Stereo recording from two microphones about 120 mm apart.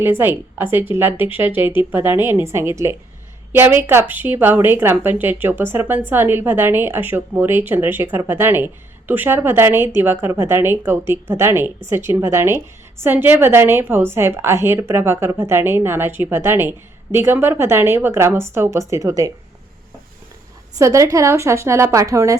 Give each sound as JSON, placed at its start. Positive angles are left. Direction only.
{"t": 0.0, "sound": "a woman's voice", "side_deg": -20}
{"t": 20.7, "sound": "speech", "side_deg": -25}